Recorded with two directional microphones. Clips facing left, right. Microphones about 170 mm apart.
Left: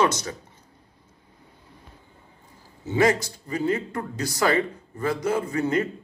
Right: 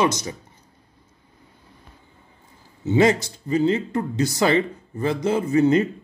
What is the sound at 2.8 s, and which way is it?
Speech, 20° right (ahead or behind).